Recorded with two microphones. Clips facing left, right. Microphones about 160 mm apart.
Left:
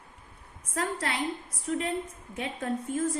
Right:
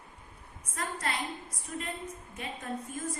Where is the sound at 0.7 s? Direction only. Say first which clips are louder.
Left 4 dB; 65° left (ahead or behind).